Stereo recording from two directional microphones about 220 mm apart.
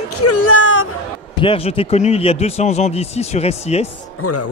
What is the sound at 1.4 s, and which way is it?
Speech, 25° left (ahead or behind).